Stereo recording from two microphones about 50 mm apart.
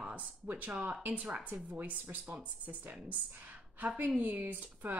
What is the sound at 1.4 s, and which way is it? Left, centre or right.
A woman's voice, right.